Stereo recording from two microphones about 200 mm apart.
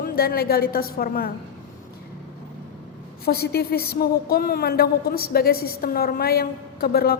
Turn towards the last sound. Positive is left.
turn(degrees=50)  # may be behind; listen again after turning